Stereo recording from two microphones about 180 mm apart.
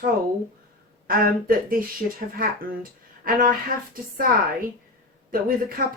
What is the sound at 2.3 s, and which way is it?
Speech, 50° right (ahead or behind).